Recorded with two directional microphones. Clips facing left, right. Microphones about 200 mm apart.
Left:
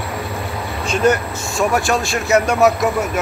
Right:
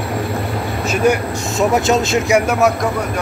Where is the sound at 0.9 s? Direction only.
10° right (ahead or behind).